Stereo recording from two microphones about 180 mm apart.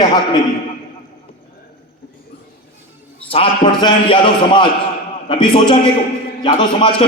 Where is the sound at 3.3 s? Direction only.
30° left (ahead or behind).